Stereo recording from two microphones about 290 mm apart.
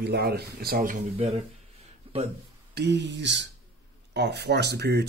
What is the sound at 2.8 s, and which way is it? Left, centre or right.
Speech, right.